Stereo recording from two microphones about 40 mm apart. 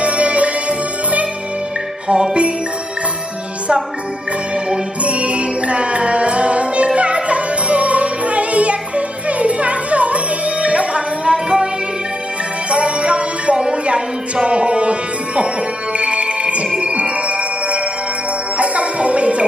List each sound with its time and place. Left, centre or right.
0.0 s music: right
2.0 s music: right
4.6 s music: right
12.7 s music: right